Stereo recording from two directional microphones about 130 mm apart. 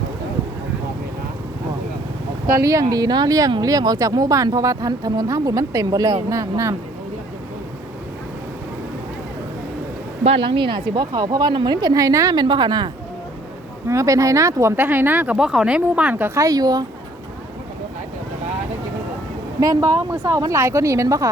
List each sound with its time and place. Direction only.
2.5 s speech: 25° right (ahead or behind)
10.2 s a woman's voice: 40° right (ahead or behind)
13.8 s speech: 25° right (ahead or behind)
19.5 s speech: 25° right (ahead or behind)